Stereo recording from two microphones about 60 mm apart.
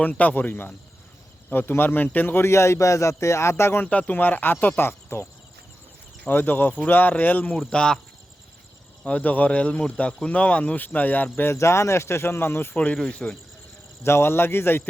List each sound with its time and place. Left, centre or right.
0.0 s a man's voice: left
2.5 s speech: left
3.5 s speech: left
3.8 s a man's voice: left
4.8 s cricket: left
6.2 s a man's voice: left
7.7 s speech: centre
9.0 s speech: left
11.5 s speech: left
12.7 s speech: left
14.0 s a man's voice: left